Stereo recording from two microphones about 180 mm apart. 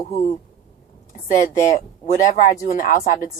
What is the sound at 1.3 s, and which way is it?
Speech, 45° left (ahead or behind).